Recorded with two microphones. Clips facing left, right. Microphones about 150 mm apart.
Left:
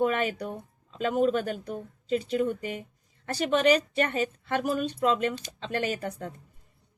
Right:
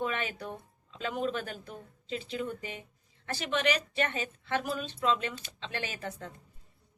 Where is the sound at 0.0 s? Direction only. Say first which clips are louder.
Left 8 dB; 45° left (ahead or behind).